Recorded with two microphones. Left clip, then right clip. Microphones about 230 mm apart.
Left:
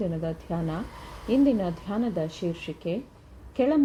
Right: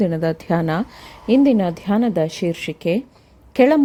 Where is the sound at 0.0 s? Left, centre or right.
Right.